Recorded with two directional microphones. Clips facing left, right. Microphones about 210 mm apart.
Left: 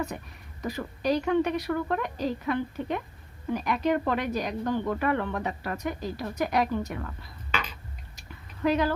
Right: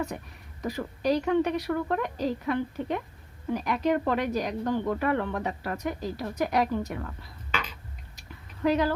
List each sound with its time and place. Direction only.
0.6 s speech: 30° right (ahead or behind)
8.6 s speech: 35° right (ahead or behind)